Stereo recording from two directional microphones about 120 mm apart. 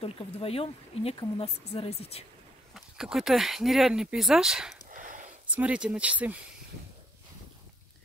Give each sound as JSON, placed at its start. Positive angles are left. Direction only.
{"t": 0.0, "sound": "speech", "side_deg": 55}
{"t": 2.7, "sound": "speech", "side_deg": -5}
{"t": 4.8, "sound": "a sound", "side_deg": -90}
{"t": 5.5, "sound": "speech", "side_deg": -10}